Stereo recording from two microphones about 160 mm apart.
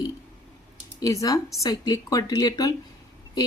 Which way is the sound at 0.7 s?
20° left (ahead or behind).